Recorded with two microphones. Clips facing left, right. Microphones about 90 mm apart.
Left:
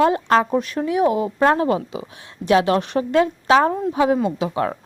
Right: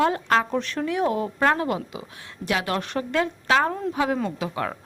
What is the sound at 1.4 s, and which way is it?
A woman's voice, 25° left (ahead or behind).